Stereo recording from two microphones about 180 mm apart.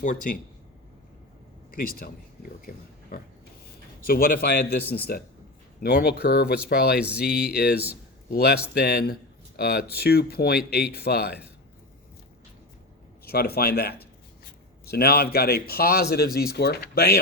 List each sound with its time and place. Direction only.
0.0 s speech: 45° left (ahead or behind)
1.7 s speech: 55° left (ahead or behind)
4.8 s speech: 10° left (ahead or behind)
5.8 s speech: 60° left (ahead or behind)
13.2 s speech: 60° left (ahead or behind)